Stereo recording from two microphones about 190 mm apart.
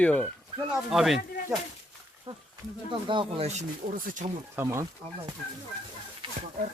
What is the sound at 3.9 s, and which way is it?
Speech, 45° right (ahead or behind).